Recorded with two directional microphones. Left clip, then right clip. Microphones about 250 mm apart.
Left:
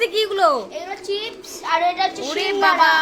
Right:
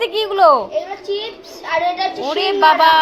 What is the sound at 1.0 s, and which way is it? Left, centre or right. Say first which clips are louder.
Speech: right 2 dB; left.